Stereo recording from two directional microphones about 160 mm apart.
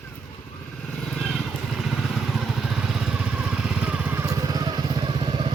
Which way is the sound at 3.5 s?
5° right (ahead or behind).